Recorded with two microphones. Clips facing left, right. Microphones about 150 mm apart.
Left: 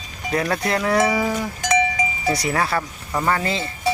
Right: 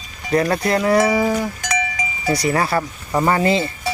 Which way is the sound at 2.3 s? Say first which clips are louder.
Right 5 dB; centre (ahead or behind).